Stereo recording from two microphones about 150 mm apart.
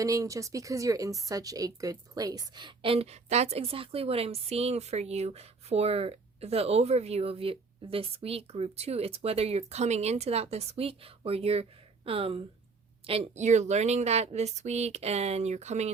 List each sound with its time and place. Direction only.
0.0 s a woman's voice: 20° right (ahead or behind); by 15.9 s 50° right (ahead or behind)